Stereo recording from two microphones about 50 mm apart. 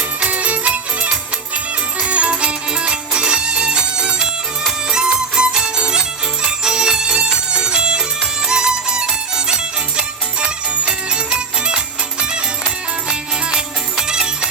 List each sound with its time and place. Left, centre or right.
0.3 s music: right
13.1 s music: centre